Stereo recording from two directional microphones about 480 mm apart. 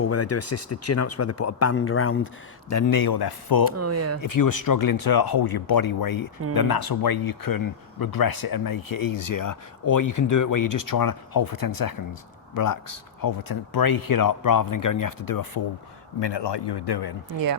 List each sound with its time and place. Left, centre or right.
0.0 s speech: left
3.8 s speech: right
4.4 s speech: left
16.2 s a man's voice: left